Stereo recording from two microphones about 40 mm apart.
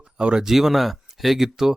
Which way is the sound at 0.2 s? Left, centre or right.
Right.